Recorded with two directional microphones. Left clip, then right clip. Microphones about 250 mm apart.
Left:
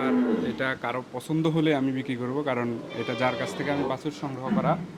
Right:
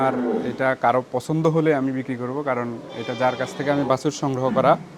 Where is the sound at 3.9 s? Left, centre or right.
Right.